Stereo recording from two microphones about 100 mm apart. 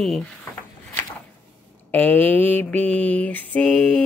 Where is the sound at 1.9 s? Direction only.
20° left (ahead or behind).